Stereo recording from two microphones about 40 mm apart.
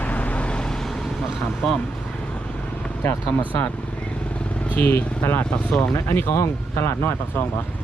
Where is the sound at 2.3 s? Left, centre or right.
Left.